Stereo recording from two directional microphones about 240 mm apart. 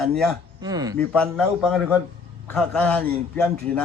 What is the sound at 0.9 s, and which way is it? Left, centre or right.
Speech, centre.